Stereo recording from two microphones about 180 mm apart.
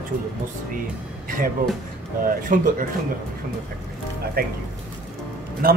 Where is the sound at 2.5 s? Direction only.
50° right (ahead or behind).